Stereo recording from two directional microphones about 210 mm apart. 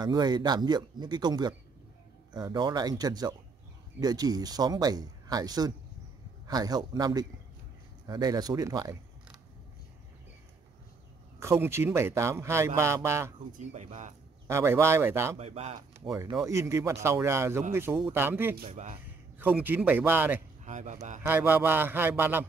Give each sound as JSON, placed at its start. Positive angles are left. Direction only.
{"t": 0.0, "sound": "a man's voice", "side_deg": -20}
{"t": 11.3, "sound": "a man's voice", "side_deg": -15}
{"t": 13.5, "sound": "speech", "side_deg": -35}
{"t": 14.5, "sound": "a man's voice", "side_deg": -10}
{"t": 15.3, "sound": "speech", "side_deg": -30}
{"t": 16.1, "sound": "a man's voice", "side_deg": -15}
{"t": 18.6, "sound": "speech", "side_deg": -35}
{"t": 19.3, "sound": "a man's voice", "side_deg": -10}
{"t": 20.6, "sound": "speech", "side_deg": -35}
{"t": 21.2, "sound": "a man's voice", "side_deg": -10}